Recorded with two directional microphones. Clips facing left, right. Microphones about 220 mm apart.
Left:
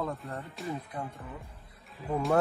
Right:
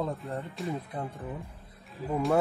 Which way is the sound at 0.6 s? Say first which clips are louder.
Right 2 dB; centre (ahead or behind).